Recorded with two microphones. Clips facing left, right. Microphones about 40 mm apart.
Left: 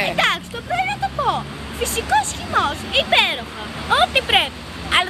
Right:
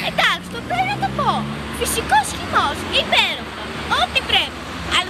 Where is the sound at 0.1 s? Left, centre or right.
Centre.